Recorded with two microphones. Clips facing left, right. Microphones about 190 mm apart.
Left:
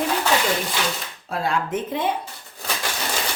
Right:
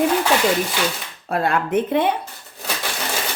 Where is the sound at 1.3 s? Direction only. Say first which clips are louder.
Right 5 dB; 60° right (ahead or behind).